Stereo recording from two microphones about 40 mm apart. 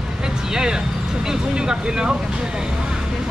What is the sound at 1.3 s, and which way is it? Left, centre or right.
Speech, centre.